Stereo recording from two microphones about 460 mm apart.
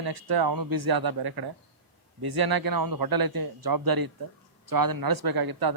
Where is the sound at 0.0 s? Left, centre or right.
Right.